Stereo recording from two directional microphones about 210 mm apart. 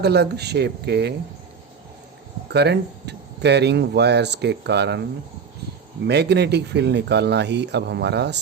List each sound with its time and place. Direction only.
0.0 s speech: 50° right (ahead or behind)
2.5 s speech: 50° right (ahead or behind)
6.1 s speech: 55° right (ahead or behind)